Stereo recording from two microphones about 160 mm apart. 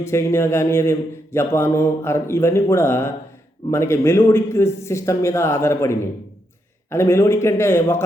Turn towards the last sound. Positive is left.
turn(degrees=15)  # may be behind; listen again after turning